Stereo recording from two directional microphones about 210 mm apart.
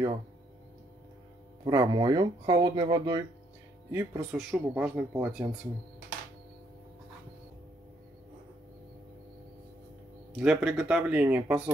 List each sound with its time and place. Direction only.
1.6 s speech: 15° right (ahead or behind)
10.4 s speech: 5° right (ahead or behind)